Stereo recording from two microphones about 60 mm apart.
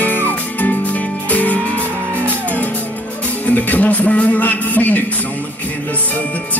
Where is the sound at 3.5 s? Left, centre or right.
Left.